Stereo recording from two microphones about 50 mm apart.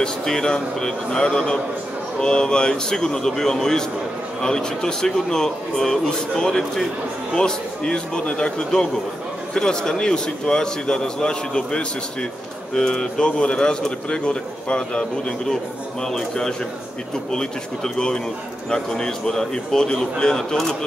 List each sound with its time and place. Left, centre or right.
0.0 s a man's voice: centre